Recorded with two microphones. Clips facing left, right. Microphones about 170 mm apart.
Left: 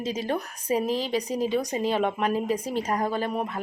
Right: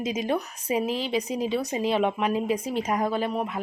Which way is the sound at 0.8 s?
40° left (ahead or behind).